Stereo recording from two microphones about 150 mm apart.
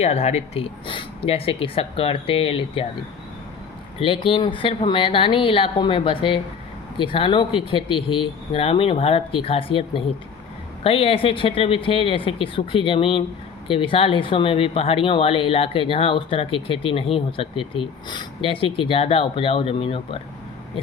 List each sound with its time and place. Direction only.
0.0 s speech: 45° left (ahead or behind)
4.0 s speech: 35° left (ahead or behind)